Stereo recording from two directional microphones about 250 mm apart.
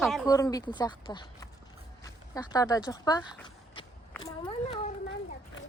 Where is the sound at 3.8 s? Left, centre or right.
Centre.